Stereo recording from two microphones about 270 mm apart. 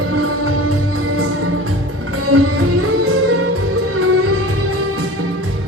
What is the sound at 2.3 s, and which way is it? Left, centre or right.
Music, right.